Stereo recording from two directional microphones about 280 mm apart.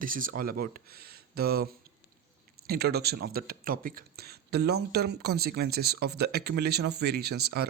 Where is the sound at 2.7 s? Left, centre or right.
Right.